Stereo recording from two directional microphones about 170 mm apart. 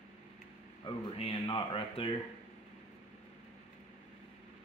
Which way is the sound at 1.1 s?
30° left (ahead or behind).